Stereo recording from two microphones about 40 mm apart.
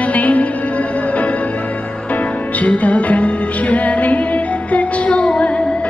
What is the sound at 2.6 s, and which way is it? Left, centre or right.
Music, left.